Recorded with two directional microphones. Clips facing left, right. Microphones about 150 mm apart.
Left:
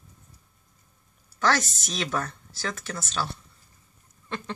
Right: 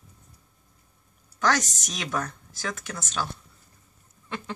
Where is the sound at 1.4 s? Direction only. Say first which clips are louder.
Even; 15° right (ahead or behind).